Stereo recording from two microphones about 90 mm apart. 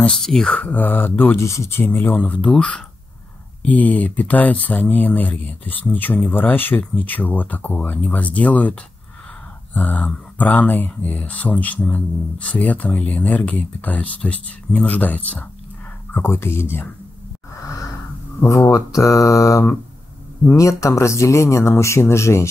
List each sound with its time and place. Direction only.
0.0 s speech: 5° left (ahead or behind)
9.8 s speech: 20° left (ahead or behind)
18.4 s speech: 35° left (ahead or behind)